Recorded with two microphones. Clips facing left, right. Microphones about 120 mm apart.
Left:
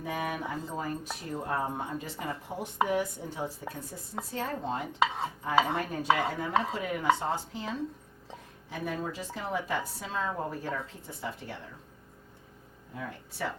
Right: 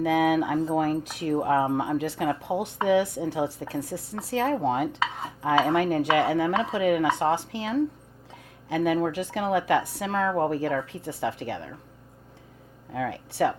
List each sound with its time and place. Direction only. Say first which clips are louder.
0.0 s a woman's voice: right 12 dB; 85° right
2.8 s a woman's voice: right 7 dB; 85° right
12.9 s speech: right 10 dB; 90° right